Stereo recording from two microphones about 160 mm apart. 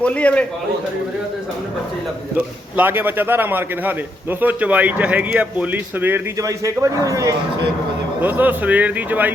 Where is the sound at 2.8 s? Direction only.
15° right (ahead or behind).